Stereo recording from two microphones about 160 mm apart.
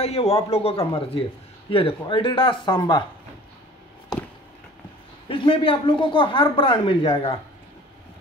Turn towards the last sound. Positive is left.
turn(degrees=35)  # may be behind; listen again after turning